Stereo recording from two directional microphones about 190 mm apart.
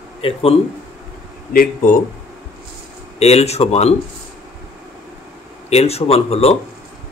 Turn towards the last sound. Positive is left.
turn(degrees=30)  # may be behind; listen again after turning